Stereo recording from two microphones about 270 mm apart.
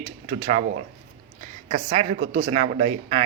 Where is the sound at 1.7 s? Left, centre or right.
Right.